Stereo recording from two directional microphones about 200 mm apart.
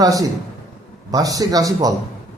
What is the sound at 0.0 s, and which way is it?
A man's voice, 20° right (ahead or behind).